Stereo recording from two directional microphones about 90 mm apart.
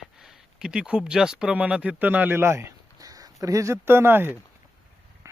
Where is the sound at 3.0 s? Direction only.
45° right (ahead or behind); by 4.2 s 25° right (ahead or behind).